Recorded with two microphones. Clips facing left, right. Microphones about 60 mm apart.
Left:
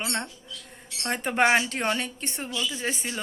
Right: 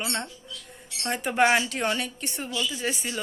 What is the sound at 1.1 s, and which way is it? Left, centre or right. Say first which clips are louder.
A woman's voice: even; left.